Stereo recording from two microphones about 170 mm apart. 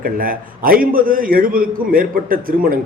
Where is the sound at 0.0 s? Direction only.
55° right (ahead or behind).